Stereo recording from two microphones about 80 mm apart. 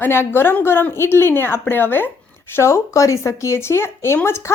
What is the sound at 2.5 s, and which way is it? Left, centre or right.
A woman's voice, left.